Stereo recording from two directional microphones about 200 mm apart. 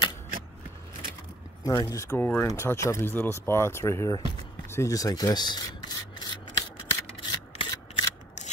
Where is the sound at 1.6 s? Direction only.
15° left (ahead or behind).